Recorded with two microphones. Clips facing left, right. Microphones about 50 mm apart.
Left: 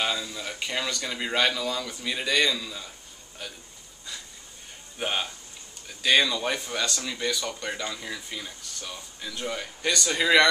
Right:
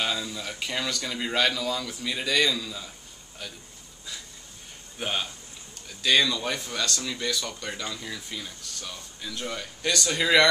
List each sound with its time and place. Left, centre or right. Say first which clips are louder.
0.0 s speech: even; centre
4.9 s speech: left 1 dB; centre